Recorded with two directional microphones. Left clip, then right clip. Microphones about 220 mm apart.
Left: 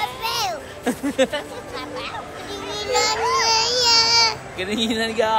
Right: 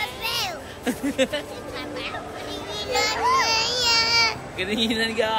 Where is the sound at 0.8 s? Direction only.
20° left (ahead or behind).